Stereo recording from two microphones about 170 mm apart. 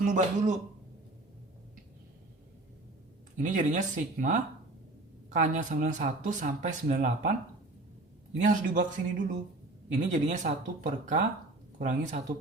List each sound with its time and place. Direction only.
0.0 s speech: 45° right (ahead or behind)
3.3 s speech: 45° right (ahead or behind)
8.4 s speech: 45° right (ahead or behind)